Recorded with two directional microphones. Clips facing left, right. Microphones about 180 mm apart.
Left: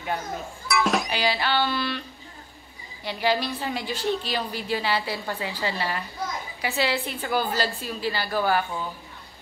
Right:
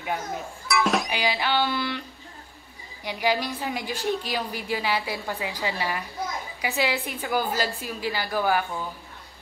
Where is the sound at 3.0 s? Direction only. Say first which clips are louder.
Left 1 dB; 15° right (ahead or behind).